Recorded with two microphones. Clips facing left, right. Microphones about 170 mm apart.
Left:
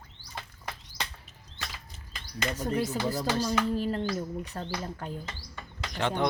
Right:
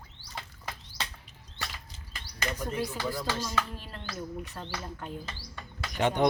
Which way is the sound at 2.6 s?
40° left (ahead or behind).